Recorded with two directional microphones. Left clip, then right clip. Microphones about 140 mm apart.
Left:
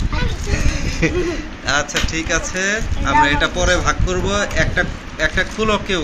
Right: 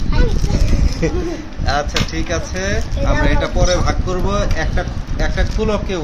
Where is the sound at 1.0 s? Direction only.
10° right (ahead or behind).